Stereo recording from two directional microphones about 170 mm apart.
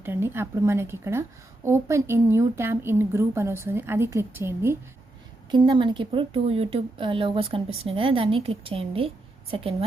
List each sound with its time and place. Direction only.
0.0 s a woman's voice: 15° right (ahead or behind)
5.5 s a woman's voice: 25° right (ahead or behind)